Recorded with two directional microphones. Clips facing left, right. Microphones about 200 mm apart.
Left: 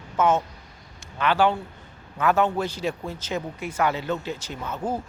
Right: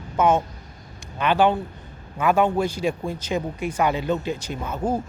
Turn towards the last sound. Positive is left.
turn(degrees=-10)  # may be behind; listen again after turning